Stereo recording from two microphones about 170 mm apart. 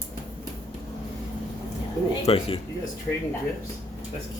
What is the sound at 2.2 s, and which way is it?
Speech, 35° left (ahead or behind).